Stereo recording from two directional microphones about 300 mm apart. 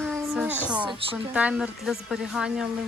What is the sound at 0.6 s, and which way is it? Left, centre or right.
A woman's voice, centre.